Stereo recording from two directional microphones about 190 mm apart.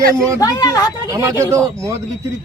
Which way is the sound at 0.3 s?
20° left (ahead or behind).